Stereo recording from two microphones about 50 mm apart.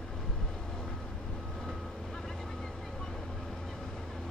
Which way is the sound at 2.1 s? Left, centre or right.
Centre.